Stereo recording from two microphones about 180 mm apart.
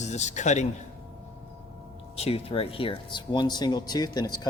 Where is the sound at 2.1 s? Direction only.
35° left (ahead or behind).